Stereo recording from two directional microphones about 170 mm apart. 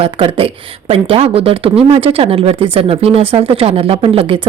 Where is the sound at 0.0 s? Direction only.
30° right (ahead or behind).